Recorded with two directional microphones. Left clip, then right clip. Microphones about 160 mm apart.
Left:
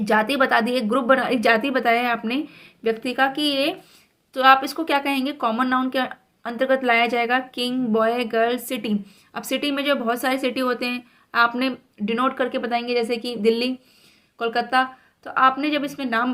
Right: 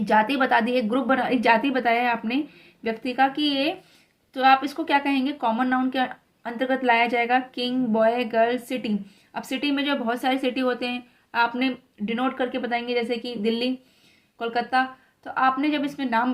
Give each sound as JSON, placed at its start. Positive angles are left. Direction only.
{"t": 0.0, "sound": "speech", "side_deg": 35}